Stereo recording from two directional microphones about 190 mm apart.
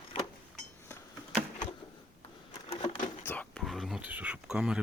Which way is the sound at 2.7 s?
30° left (ahead or behind).